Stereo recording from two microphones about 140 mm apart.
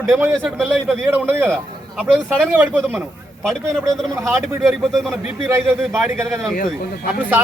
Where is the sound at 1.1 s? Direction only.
15° right (ahead or behind).